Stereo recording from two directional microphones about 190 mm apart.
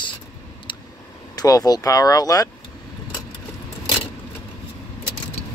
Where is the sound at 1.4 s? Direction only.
20° left (ahead or behind).